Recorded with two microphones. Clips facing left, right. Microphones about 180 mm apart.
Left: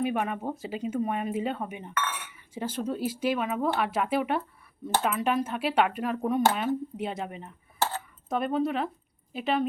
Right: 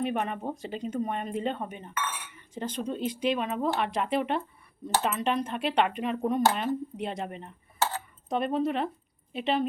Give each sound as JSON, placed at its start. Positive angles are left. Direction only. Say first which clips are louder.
{"t": 0.0, "sound": "speech", "louder": "left 1 dB", "side_deg": 5}